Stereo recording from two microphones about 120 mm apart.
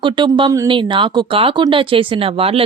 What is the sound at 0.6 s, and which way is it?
Speech, 45° right (ahead or behind).